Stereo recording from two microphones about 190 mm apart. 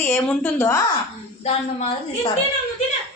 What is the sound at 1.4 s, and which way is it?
Speech, 30° left (ahead or behind).